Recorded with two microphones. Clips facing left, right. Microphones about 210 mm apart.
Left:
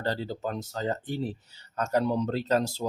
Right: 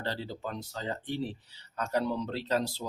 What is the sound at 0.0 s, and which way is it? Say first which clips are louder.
Speech: left 5 dB; 40° left (ahead or behind).